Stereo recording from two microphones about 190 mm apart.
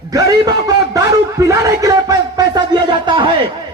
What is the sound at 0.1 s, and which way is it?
Speech, 20° right (ahead or behind).